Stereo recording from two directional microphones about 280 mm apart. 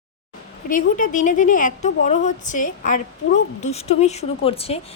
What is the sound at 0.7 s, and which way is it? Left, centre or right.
A woman's voice, left.